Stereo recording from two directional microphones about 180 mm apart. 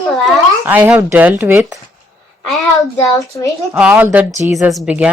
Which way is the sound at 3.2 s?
20° left (ahead or behind).